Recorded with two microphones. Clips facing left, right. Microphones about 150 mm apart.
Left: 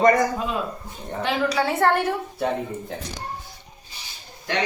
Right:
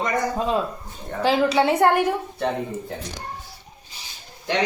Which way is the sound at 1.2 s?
30° right (ahead or behind).